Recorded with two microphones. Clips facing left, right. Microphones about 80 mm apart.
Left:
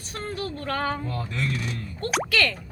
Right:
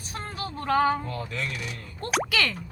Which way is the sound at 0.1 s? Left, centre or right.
Centre.